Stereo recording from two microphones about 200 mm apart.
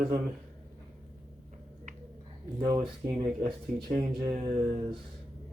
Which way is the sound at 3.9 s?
40° right (ahead or behind).